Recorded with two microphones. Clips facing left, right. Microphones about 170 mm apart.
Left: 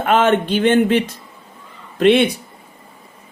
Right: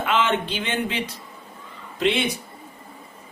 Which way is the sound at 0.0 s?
50° left (ahead or behind).